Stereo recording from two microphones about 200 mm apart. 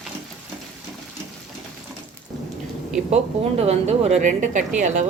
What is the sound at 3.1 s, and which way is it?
Speech, 30° right (ahead or behind).